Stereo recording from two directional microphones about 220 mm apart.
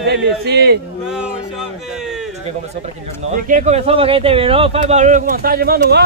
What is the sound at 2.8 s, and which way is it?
Speech, 35° right (ahead or behind).